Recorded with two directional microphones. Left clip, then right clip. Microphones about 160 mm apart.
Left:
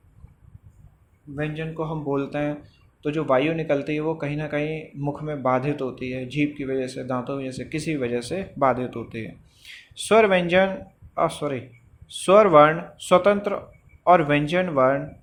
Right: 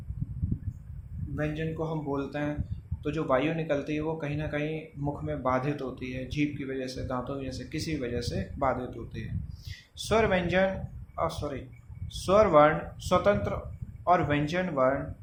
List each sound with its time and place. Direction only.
1.4 s speech: 35° left (ahead or behind)